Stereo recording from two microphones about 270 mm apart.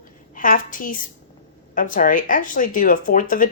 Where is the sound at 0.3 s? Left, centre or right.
Left.